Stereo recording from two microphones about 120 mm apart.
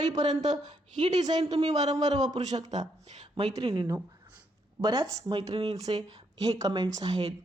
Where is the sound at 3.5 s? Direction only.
35° right (ahead or behind).